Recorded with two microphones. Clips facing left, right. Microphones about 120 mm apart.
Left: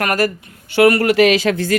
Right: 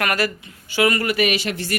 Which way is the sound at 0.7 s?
60° left (ahead or behind).